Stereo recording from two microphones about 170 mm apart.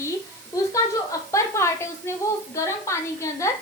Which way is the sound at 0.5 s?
20° left (ahead or behind).